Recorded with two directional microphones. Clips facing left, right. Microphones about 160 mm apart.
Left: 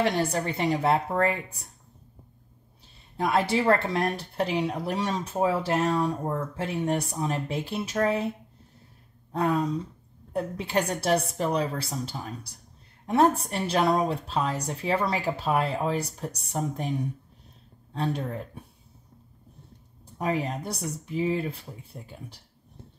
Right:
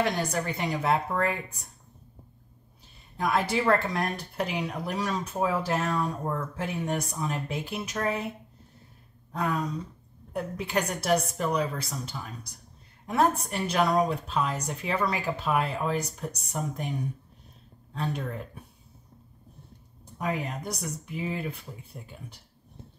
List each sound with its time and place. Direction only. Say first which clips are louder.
0.0 s a woman's voice: left 2 dB; 30° left (ahead or behind)
3.2 s a woman's voice: left 2 dB; 30° left (ahead or behind)
9.3 s a woman's voice: left 4 dB; 30° left (ahead or behind)
17.9 s a woman's voice: left 3 dB; 30° left (ahead or behind)
20.2 s a woman's voice: left 3 dB; 30° left (ahead or behind)